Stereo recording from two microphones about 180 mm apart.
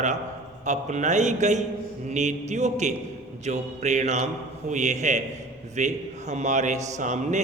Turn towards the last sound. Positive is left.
turn(degrees=-40)  # may be behind; listen again after turning